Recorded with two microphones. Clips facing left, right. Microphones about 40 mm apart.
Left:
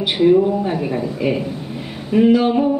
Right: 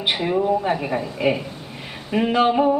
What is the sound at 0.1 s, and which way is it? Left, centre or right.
Speech, centre.